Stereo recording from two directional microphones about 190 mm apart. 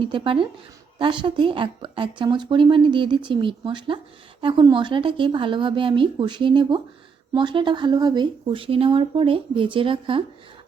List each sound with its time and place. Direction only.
0.0 s a woman's voice: 25° right (ahead or behind)